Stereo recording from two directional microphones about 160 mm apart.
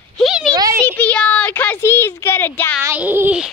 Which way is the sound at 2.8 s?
10° right (ahead or behind).